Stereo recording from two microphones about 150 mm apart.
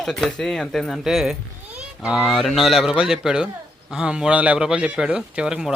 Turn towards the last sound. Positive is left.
turn(degrees=-5)  # may be behind; listen again after turning